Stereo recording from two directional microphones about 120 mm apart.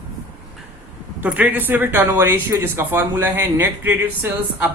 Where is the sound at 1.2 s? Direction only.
15° right (ahead or behind).